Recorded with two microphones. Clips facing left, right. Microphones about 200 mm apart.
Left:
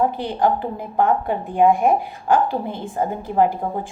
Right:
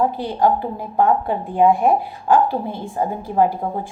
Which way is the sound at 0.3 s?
50° left (ahead or behind).